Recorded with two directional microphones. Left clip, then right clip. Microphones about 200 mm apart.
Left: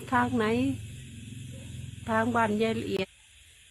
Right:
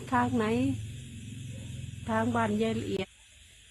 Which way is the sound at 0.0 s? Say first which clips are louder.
Left 2 dB; 5° left (ahead or behind).